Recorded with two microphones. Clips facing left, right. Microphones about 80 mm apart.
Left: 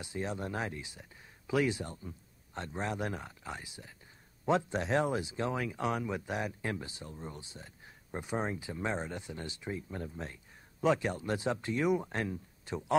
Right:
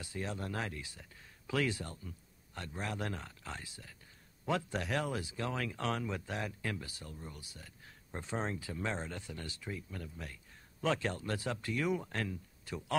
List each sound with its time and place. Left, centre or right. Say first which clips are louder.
0.0 s speech: left 3 dB; left